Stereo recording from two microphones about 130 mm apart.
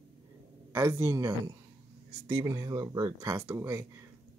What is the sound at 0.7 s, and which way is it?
Speech, 20° right (ahead or behind).